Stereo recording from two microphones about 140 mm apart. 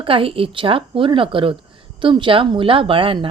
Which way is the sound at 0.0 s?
40° right (ahead or behind).